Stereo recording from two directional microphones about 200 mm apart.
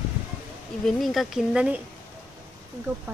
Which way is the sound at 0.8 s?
Centre (ahead or behind).